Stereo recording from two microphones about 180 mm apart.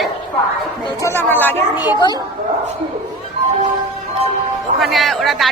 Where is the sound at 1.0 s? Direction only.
10° left (ahead or behind).